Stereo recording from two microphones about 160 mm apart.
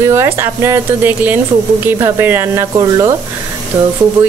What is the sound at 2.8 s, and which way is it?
Speech, 25° right (ahead or behind).